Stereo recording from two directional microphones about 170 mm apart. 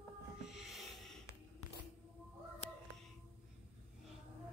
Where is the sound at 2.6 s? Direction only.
40° left (ahead or behind).